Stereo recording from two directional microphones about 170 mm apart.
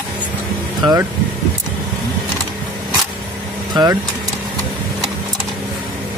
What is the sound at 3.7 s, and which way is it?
Speech, 25° right (ahead or behind).